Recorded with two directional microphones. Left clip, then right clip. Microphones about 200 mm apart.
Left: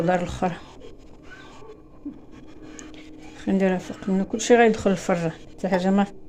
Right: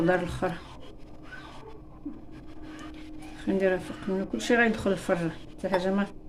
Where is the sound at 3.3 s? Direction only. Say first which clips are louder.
Left 2 dB; 35° left (ahead or behind).